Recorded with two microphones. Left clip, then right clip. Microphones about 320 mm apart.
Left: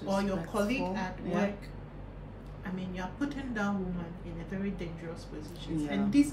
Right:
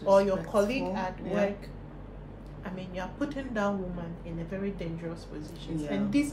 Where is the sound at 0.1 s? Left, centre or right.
Centre.